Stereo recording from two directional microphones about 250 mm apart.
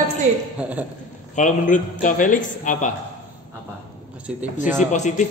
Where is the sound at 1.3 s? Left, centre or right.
Left.